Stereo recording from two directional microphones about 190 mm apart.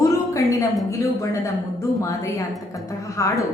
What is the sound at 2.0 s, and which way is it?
Speech, 15° left (ahead or behind).